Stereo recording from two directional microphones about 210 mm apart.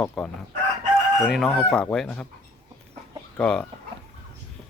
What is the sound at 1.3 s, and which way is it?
Speech, centre (ahead or behind).